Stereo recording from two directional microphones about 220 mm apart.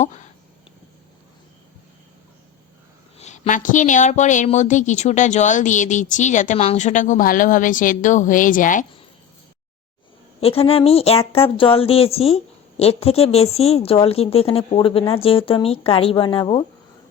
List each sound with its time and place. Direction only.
0.0 s speech: 35° left (ahead or behind)
3.2 s a woman's voice: 30° left (ahead or behind)
10.4 s a woman's voice: 25° left (ahead or behind)